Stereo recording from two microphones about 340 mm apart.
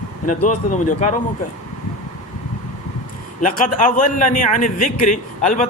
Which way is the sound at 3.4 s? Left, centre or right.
Left.